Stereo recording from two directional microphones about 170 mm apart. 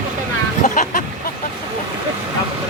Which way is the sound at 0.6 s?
50° left (ahead or behind).